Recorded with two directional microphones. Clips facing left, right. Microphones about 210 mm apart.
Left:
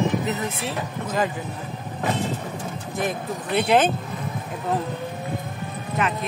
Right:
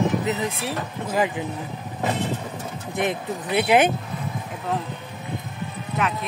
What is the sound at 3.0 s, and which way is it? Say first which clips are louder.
Speech: right 2 dB; 20° right (ahead or behind).